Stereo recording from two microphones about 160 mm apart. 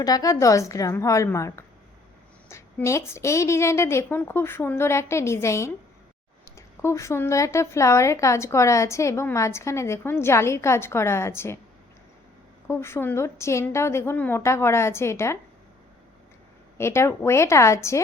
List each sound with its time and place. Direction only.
0.0 s a woman's voice: 20° left (ahead or behind)
12.6 s a woman's voice: 15° left (ahead or behind)
16.7 s a woman's voice: 15° left (ahead or behind)